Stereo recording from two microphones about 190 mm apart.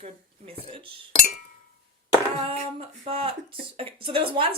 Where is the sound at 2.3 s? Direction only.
30° right (ahead or behind).